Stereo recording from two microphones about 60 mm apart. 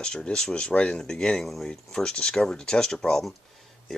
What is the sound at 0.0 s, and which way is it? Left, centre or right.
Speech, centre.